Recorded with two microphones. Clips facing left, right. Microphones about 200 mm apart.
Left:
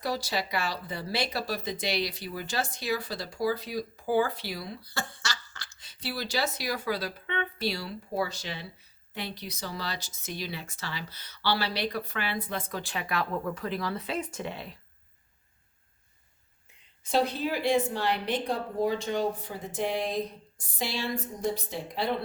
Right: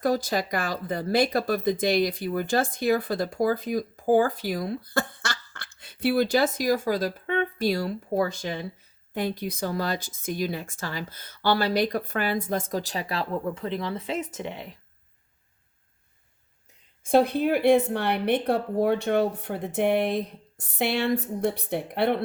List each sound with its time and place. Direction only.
0.0 s speech: 50° right (ahead or behind); by 14.8 s 15° right (ahead or behind)
16.6 s a woman's voice: 50° right (ahead or behind)